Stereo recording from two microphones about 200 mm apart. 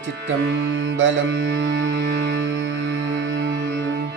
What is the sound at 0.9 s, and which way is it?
Music, 70° right (ahead or behind).